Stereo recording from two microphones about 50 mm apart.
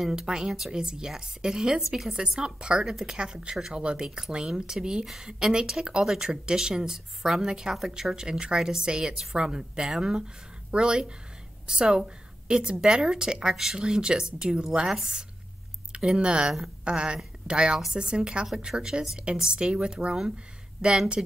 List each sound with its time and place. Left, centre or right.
0.0 s a woman's voice: centre
2.1 s a woman's voice: centre